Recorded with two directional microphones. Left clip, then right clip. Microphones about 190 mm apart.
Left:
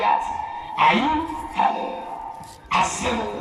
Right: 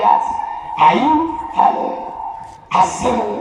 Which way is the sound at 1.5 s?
30° right (ahead or behind).